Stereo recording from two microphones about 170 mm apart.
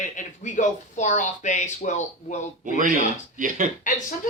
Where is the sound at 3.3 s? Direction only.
50° right (ahead or behind).